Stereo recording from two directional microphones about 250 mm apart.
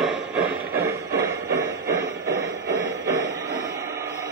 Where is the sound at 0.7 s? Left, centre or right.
Right.